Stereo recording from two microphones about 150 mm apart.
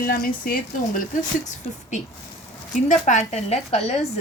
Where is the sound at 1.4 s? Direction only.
55° left (ahead or behind).